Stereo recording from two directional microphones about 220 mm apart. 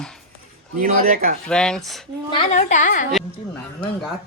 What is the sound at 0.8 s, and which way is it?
Speech, 40° right (ahead or behind).